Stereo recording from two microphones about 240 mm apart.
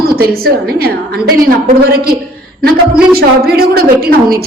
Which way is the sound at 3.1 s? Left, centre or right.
Right.